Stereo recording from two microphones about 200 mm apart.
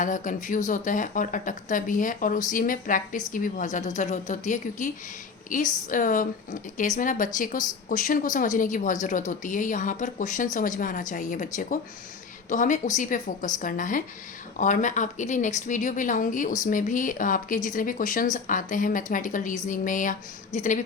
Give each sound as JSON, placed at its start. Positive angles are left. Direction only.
{"t": 0.0, "sound": "a woman's voice", "side_deg": 40}